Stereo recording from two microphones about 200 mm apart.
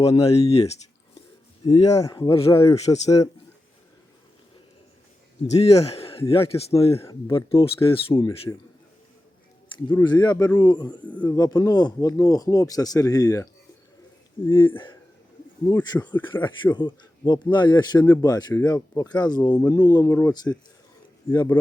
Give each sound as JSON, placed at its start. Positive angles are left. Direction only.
{"t": 0.1, "sound": "speech", "side_deg": 30}
{"t": 1.6, "sound": "speech", "side_deg": 20}
{"t": 5.5, "sound": "speech", "side_deg": 30}
{"t": 9.9, "sound": "speech", "side_deg": 20}
{"t": 11.0, "sound": "speech", "side_deg": 5}
{"t": 11.3, "sound": "speech", "side_deg": 20}
{"t": 15.6, "sound": "speech", "side_deg": 20}